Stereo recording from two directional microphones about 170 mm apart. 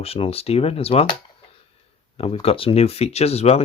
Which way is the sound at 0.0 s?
35° left (ahead or behind).